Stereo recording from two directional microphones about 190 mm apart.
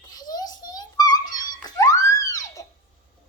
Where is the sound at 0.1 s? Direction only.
20° left (ahead or behind).